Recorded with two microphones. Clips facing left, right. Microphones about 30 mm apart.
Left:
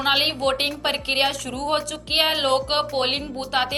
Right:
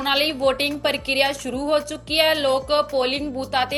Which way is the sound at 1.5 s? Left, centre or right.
Left.